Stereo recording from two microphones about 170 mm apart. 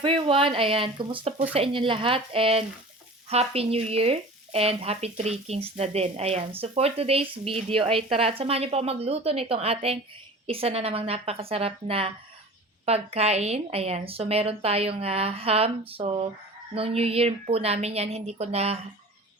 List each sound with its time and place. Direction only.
0.0 s speech: 30° right (ahead or behind)